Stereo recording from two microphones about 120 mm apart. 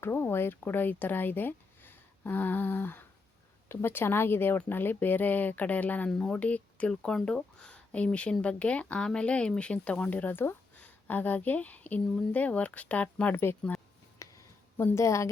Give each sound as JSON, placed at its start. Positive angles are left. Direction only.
{"t": 0.0, "sound": "speech", "side_deg": 20}
{"t": 14.2, "sound": "a sound", "side_deg": 25}
{"t": 14.8, "sound": "a woman's voice", "side_deg": 25}